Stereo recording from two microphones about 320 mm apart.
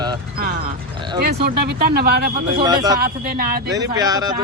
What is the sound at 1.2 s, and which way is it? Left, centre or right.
Speech, right.